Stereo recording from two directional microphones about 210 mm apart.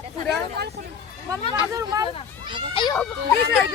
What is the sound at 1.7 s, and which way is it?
Speech, 15° right (ahead or behind).